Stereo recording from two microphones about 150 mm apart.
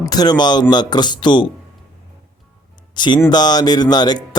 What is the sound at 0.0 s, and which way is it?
Speech, 25° left (ahead or behind).